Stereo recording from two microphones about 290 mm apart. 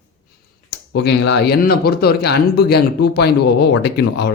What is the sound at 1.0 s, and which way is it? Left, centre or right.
Speech, left.